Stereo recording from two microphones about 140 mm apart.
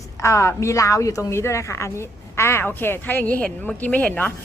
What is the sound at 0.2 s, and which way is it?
A woman's voice, 20° left (ahead or behind).